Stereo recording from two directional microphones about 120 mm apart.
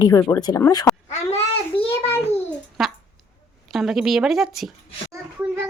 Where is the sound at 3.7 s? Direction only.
5° right (ahead or behind).